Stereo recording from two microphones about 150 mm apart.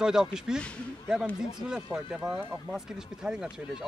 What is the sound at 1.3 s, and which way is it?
Speech, 15° left (ahead or behind).